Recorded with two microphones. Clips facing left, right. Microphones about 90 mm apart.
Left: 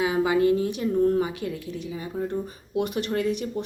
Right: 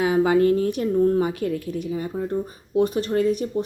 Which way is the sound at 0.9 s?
30° right (ahead or behind).